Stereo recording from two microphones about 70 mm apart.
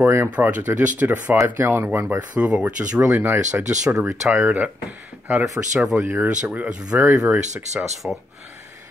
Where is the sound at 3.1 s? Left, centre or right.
Right.